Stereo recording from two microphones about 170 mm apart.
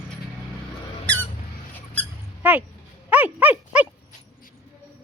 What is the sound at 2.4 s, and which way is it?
Speech, 10° right (ahead or behind).